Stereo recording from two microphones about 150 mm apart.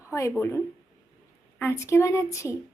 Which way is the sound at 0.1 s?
20° left (ahead or behind).